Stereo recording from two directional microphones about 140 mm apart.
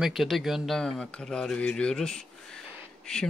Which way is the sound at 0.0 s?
Centre (ahead or behind).